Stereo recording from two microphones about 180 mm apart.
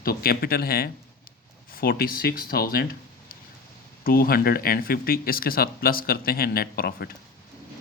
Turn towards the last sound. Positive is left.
turn(degrees=55)  # may be behind; listen again after turning